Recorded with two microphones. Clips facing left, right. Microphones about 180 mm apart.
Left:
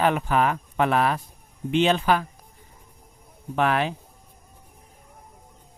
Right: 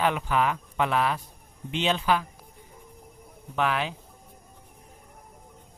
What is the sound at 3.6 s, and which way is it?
Speech, 50° left (ahead or behind).